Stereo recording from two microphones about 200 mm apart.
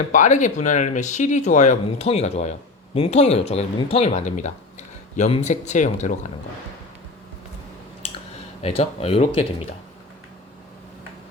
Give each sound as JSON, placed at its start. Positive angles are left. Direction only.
{"t": 0.1, "sound": "speech", "side_deg": 40}
{"t": 8.6, "sound": "speech", "side_deg": 30}